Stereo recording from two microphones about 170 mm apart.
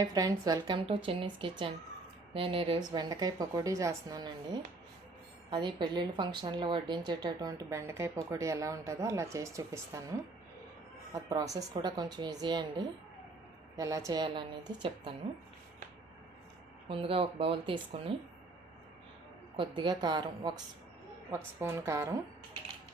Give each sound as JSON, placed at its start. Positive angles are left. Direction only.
{"t": 0.0, "sound": "a woman's voice", "side_deg": -20}
{"t": 16.9, "sound": "speech", "side_deg": -35}
{"t": 19.5, "sound": "a woman's voice", "side_deg": -25}